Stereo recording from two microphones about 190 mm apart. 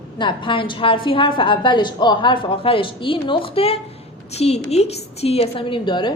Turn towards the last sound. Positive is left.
turn(degrees=25)  # may be behind; listen again after turning